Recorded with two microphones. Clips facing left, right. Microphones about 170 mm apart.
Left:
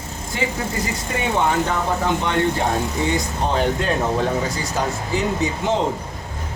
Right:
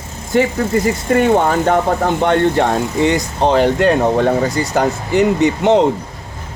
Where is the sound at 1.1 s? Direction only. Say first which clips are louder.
Right 6 dB; 55° right (ahead or behind).